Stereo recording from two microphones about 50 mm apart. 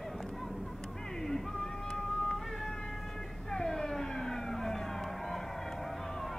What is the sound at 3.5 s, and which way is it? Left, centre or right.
Vehicle, centre.